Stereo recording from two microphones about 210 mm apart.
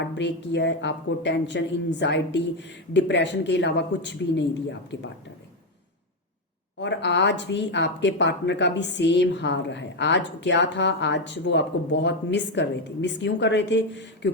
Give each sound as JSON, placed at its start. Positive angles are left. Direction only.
{"t": 0.2, "sound": "a woman's voice", "side_deg": 55}
{"t": 6.7, "sound": "a woman's voice", "side_deg": 55}